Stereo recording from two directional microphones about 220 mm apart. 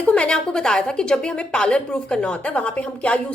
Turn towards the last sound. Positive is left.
turn(degrees=5)  # may be behind; listen again after turning